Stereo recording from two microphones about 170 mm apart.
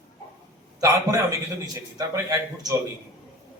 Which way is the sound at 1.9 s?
20° right (ahead or behind).